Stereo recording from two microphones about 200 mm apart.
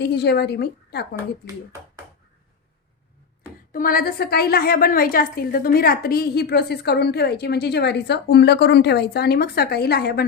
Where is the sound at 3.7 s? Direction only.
45° left (ahead or behind).